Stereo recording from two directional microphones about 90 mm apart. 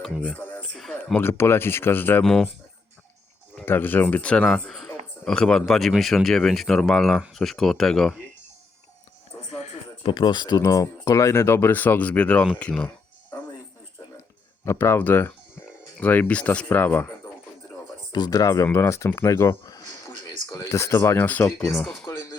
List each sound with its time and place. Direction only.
0.3 s music: 20° left (ahead or behind)
0.8 s a sound: 10° left (ahead or behind)
1.2 s speech: 25° left (ahead or behind)
2.2 s speech: 5° left (ahead or behind)
3.7 s speech: 20° left (ahead or behind); by 8.1 s 5° left (ahead or behind)
10.0 s speech: 70° left (ahead or behind)
10.6 s speech: 40° left (ahead or behind); by 12.9 s 10° left (ahead or behind)
14.6 s speech: 30° left (ahead or behind)
18.1 s speech: 50° left (ahead or behind); by 21.8 s 20° left (ahead or behind)